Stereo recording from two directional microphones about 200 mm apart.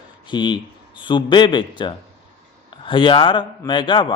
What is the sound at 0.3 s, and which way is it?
Speech, 20° left (ahead or behind).